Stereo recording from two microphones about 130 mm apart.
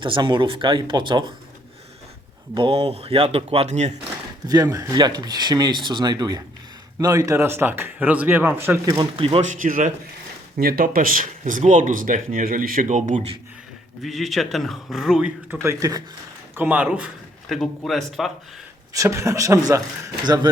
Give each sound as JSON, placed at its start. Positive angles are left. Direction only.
{"t": 0.0, "sound": "speech", "side_deg": -40}
{"t": 2.6, "sound": "speech", "side_deg": -45}
{"t": 4.4, "sound": "speech", "side_deg": -25}
{"t": 8.9, "sound": "speech", "side_deg": -40}
{"t": 9.4, "sound": "a man's voice", "side_deg": -80}
{"t": 14.0, "sound": "speech", "side_deg": 0}
{"t": 15.6, "sound": "speech", "side_deg": -25}
{"t": 16.6, "sound": "speech", "side_deg": -10}
{"t": 18.9, "sound": "speech", "side_deg": -20}